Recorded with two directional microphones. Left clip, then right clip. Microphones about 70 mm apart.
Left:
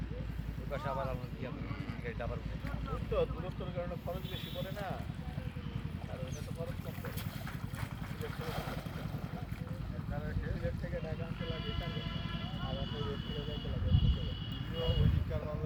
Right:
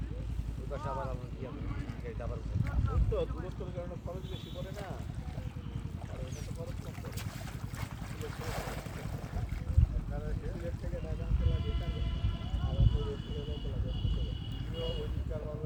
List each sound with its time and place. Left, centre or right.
0.7 s speech: centre
2.9 s speech: centre
8.2 s speech: centre
11.4 s speech: centre
12.6 s vehicle: centre
14.8 s speech: centre